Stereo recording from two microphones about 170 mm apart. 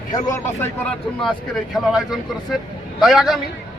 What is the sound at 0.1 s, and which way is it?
Speech, 15° left (ahead or behind).